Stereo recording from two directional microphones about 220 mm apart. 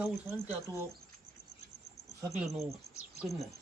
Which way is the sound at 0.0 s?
5° right (ahead or behind).